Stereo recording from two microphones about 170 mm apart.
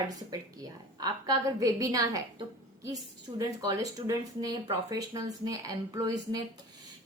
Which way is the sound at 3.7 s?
20° right (ahead or behind).